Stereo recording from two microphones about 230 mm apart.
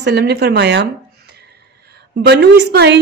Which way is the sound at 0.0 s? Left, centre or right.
Right.